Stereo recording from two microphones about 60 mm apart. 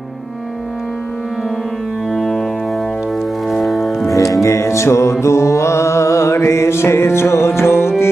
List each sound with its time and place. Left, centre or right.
2.1 s music: centre
3.4 s music: centre
4.2 s music: left
5.2 s mantra: left